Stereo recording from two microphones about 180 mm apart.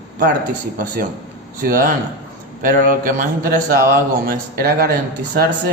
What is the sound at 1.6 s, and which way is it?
A man's voice, 55° right (ahead or behind).